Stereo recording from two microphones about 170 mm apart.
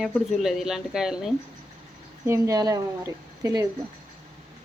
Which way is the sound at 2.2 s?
15° right (ahead or behind).